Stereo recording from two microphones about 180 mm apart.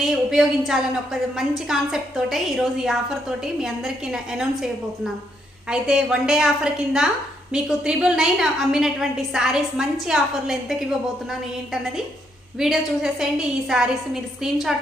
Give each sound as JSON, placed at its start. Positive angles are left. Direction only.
{"t": 0.0, "sound": "a woman's voice", "side_deg": 0}